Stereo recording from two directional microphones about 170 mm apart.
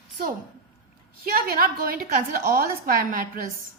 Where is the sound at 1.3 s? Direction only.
60° right (ahead or behind).